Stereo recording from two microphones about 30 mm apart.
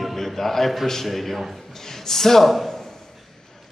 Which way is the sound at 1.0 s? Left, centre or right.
Centre.